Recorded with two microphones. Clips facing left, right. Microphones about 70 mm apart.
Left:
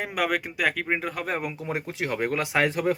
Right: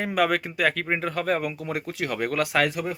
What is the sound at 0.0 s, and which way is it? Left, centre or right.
Speech, centre.